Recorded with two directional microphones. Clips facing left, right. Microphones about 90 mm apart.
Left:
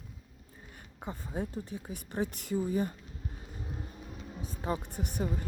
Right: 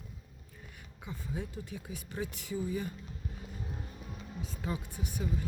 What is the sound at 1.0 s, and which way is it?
Speech, 45° left (ahead or behind).